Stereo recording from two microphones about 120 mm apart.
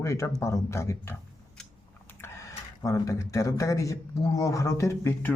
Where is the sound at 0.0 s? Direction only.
25° left (ahead or behind).